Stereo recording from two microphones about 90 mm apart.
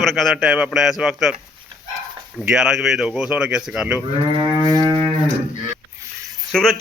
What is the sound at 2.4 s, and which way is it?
Speech, 5° right (ahead or behind).